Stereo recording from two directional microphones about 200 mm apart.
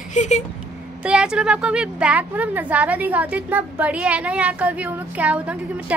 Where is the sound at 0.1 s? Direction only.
35° left (ahead or behind).